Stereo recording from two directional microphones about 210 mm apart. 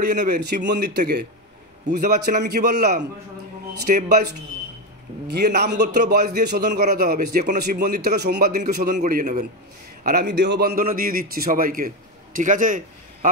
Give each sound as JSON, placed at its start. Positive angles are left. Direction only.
{"t": 0.1, "sound": "a man's voice", "side_deg": -40}
{"t": 0.5, "sound": "a man's voice", "side_deg": -50}
{"t": 9.0, "sound": "a man's voice", "side_deg": -35}
{"t": 10.0, "sound": "a man's voice", "side_deg": -50}
{"t": 10.8, "sound": "a man's voice", "side_deg": -40}